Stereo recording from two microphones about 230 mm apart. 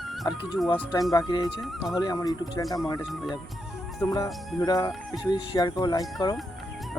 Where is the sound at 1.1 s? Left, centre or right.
Centre.